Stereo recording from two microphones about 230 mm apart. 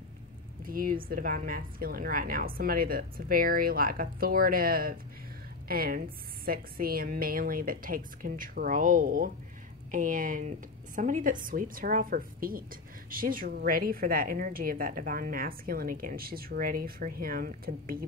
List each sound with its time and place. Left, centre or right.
0.7 s a woman's voice: right